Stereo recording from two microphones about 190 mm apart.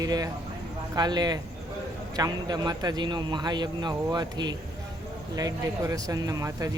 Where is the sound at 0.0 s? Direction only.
20° right (ahead or behind).